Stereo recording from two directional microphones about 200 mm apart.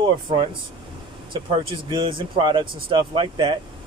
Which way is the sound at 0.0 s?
25° right (ahead or behind).